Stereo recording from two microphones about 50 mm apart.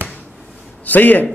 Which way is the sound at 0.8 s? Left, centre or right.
Left.